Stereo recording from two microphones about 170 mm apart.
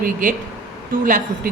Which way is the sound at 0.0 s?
50° right (ahead or behind).